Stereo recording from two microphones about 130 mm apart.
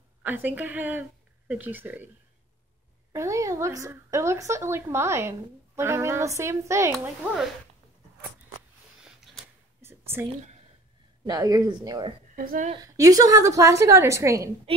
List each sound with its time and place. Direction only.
0.2 s a woman's voice: 15° right (ahead or behind)
3.1 s speech: 25° right (ahead or behind)
9.0 s a sound: centre (ahead or behind)
9.8 s whispering: 20° right (ahead or behind)
11.2 s speech: 25° right (ahead or behind)
12.4 s a woman's voice: 80° right
12.8 s speech: 25° right (ahead or behind)